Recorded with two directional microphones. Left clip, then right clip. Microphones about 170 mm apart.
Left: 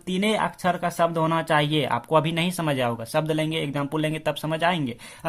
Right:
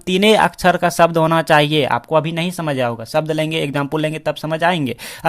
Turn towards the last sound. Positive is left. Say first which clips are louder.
# right 7 dB
turn(degrees=-35)  # may be behind; listen again after turning